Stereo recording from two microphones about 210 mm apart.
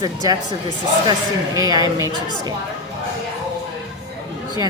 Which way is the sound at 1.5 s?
20° right (ahead or behind).